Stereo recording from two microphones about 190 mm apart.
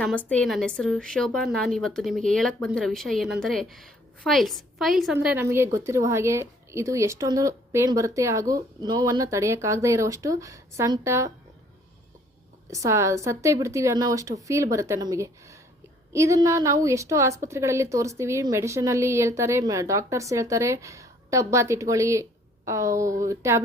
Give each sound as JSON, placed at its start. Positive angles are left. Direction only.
{"t": 0.0, "sound": "a woman's voice", "side_deg": 5}
{"t": 12.7, "sound": "a woman's voice", "side_deg": -15}